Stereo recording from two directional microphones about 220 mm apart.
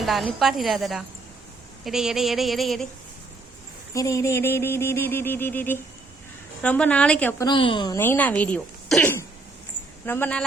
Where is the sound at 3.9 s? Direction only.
15° left (ahead or behind).